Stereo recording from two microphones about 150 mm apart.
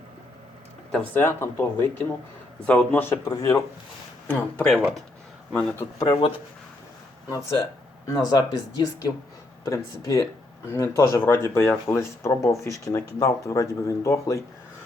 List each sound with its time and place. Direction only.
0.9 s speech: 5° left (ahead or behind)
1.2 s speech: 15° left (ahead or behind)
4.3 s speech: 10° left (ahead or behind)
6.0 s speech: 30° left (ahead or behind)
8.0 s speech: 25° left (ahead or behind)